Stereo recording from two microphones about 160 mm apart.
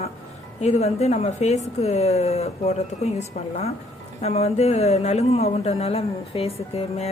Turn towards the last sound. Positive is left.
turn(degrees=40)  # may be behind; listen again after turning